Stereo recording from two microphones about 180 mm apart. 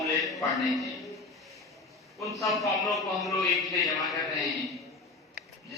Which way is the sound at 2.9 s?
Centre (ahead or behind).